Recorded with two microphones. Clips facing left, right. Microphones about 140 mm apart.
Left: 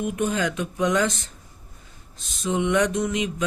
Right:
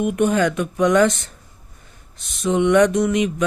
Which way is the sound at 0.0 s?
65° right (ahead or behind).